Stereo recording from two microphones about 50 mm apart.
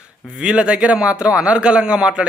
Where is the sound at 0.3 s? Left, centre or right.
Centre.